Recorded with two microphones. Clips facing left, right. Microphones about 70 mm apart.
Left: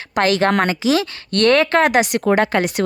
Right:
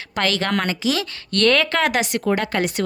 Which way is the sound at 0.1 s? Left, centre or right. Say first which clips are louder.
Left 6 dB; centre.